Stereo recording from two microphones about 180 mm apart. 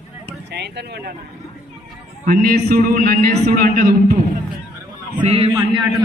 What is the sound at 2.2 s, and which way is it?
Speech, 55° right (ahead or behind).